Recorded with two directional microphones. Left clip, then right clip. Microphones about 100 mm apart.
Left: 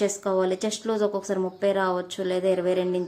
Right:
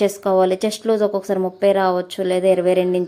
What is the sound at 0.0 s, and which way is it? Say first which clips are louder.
A woman's voice: right 8 dB; 45° right (ahead or behind).